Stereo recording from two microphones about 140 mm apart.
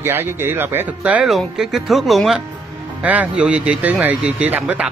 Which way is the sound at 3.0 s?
10° right (ahead or behind).